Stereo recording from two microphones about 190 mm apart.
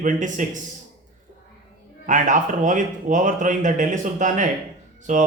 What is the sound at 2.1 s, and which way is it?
Speech, 40° right (ahead or behind).